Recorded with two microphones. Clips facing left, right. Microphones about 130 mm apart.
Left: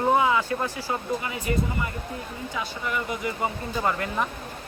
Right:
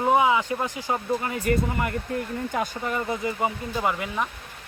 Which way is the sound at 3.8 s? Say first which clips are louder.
Left 1 dB; 5° right (ahead or behind).